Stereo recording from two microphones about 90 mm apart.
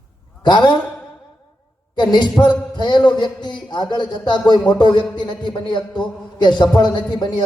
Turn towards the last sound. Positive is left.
turn(degrees=55)  # may be behind; listen again after turning